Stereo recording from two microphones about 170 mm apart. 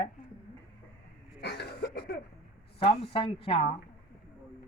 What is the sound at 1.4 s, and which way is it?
Cough, 75° left (ahead or behind).